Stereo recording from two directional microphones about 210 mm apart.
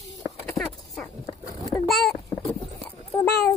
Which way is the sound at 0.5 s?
5° left (ahead or behind).